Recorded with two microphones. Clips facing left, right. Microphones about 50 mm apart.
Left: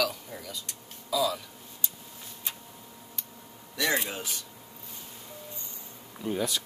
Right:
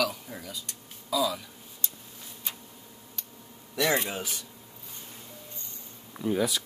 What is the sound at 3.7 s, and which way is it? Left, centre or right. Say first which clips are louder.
Speech: right 2 dB; centre.